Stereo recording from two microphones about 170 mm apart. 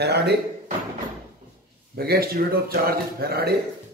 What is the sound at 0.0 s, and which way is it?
Speech, 75° right (ahead or behind).